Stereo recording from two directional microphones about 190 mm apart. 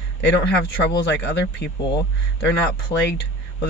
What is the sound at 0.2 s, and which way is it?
Speech, 65° left (ahead or behind).